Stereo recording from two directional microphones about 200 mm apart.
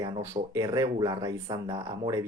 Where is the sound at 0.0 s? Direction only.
15° right (ahead or behind).